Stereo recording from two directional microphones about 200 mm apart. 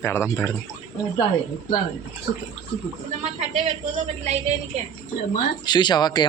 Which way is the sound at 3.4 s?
30° right (ahead or behind).